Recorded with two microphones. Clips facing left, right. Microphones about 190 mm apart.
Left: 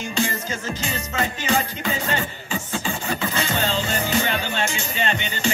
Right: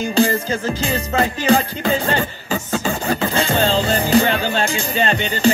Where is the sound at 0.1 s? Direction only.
35° right (ahead or behind).